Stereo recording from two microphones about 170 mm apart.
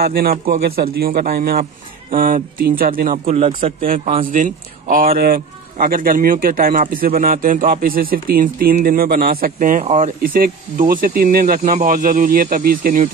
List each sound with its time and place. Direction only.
0.0 s speech: 60° right (ahead or behind)
3.3 s a man's voice: 40° right (ahead or behind)
3.8 s speech: 55° right (ahead or behind)